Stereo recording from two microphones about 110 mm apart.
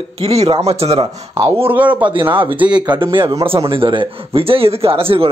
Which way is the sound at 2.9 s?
50° right (ahead or behind).